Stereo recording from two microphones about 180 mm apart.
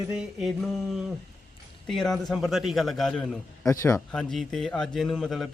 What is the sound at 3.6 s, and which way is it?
Speech, 15° left (ahead or behind).